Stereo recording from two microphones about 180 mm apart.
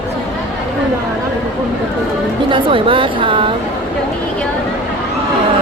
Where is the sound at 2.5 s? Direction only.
30° right (ahead or behind).